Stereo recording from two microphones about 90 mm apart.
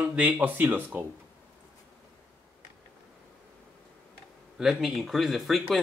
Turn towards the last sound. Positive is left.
turn(degrees=0)  # may be behind; listen again after turning